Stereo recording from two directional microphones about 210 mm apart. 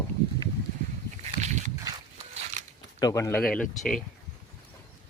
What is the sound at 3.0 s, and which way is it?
Speech, 15° left (ahead or behind).